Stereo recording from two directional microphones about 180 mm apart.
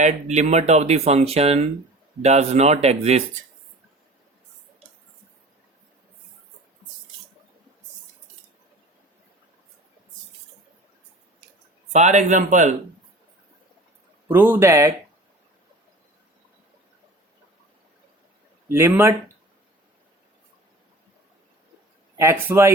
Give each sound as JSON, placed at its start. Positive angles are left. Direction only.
{"t": 0.0, "sound": "speech", "side_deg": -40}
{"t": 11.9, "sound": "speech", "side_deg": -40}
{"t": 14.3, "sound": "speech", "side_deg": -10}
{"t": 18.7, "sound": "speech", "side_deg": -15}
{"t": 22.2, "sound": "speech", "side_deg": -15}